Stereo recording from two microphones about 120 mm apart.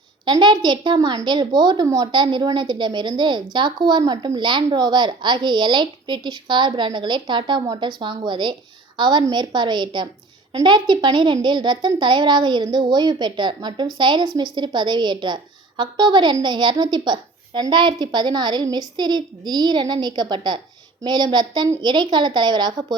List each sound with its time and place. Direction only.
0.3 s a woman's voice: 40° right (ahead or behind)